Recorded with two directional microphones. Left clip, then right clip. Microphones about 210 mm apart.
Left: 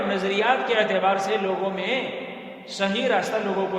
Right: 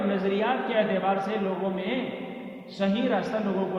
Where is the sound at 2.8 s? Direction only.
40° left (ahead or behind).